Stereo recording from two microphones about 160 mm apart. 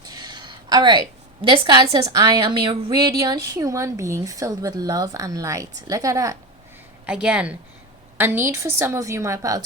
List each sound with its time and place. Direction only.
0.0 s a woman's voice: 25° right (ahead or behind)
3.1 s a woman's voice: 20° right (ahead or behind)
7.0 s a woman's voice: 5° right (ahead or behind)